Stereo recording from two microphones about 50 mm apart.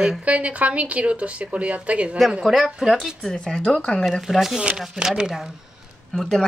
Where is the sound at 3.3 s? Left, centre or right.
Centre.